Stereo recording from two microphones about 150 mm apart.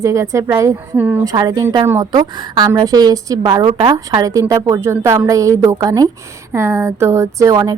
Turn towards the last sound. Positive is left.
turn(degrees=-25)  # may be behind; listen again after turning